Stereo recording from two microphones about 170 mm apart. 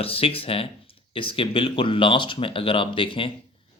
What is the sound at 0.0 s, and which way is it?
Speech, 35° left (ahead or behind).